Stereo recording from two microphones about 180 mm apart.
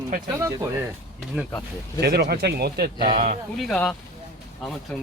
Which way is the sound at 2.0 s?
65° right (ahead or behind).